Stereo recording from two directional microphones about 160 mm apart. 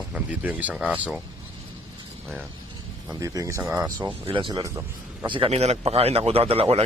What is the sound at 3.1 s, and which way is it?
Speech, 20° right (ahead or behind).